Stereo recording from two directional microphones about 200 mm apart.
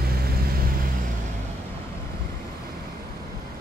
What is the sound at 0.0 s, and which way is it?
Vehicle, 50° right (ahead or behind).